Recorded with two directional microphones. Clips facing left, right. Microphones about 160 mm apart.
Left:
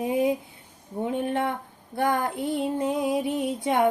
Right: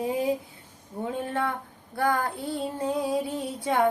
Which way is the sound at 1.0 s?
20° left (ahead or behind).